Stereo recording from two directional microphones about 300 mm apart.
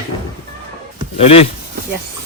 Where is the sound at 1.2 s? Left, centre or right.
Centre.